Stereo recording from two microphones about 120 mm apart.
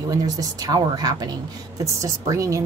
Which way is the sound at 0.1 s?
30° right (ahead or behind).